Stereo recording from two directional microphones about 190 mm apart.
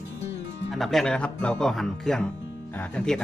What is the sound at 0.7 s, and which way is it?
Speech, centre (ahead or behind).